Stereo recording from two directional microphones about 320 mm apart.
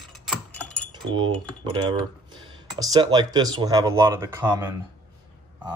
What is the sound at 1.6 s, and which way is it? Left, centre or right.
Speech, centre.